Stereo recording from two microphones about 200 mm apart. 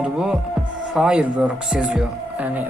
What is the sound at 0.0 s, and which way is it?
Speech, 5° right (ahead or behind).